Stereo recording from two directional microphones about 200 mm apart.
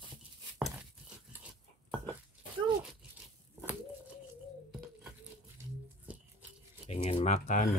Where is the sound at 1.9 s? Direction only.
25° right (ahead or behind).